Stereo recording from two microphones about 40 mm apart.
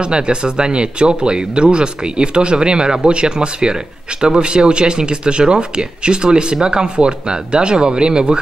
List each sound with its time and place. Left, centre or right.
0.0 s speech: right